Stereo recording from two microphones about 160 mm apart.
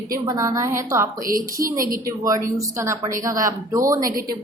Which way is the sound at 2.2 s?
20° right (ahead or behind).